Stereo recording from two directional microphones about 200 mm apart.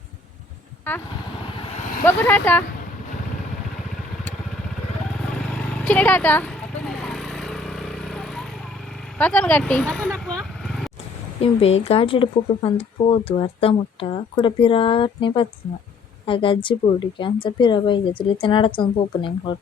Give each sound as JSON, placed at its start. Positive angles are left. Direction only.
{"t": 1.7, "sound": "vehicle", "side_deg": 40}
{"t": 2.0, "sound": "speech", "side_deg": 10}
{"t": 5.9, "sound": "a sound", "side_deg": 10}
{"t": 9.1, "sound": "speech", "side_deg": 5}
{"t": 11.3, "sound": "speech", "side_deg": 30}